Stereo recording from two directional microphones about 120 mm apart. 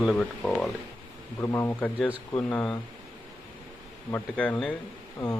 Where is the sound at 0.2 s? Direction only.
10° left (ahead or behind).